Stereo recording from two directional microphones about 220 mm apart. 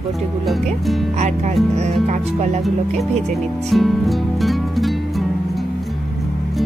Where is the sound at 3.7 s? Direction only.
Centre (ahead or behind).